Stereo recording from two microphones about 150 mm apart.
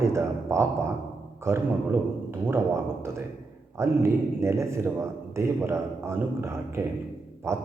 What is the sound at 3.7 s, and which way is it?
A man's voice, 20° right (ahead or behind).